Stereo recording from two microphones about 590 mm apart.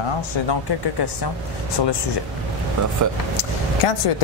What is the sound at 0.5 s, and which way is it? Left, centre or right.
Speech, left.